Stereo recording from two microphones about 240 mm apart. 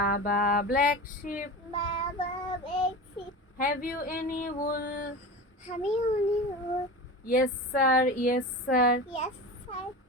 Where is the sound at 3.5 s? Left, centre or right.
Left.